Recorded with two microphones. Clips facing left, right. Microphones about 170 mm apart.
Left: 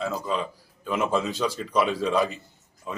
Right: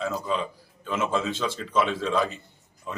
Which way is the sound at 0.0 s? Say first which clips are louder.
Even; 5° left (ahead or behind).